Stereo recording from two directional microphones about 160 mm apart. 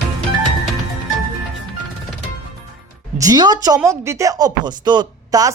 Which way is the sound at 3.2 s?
25° right (ahead or behind).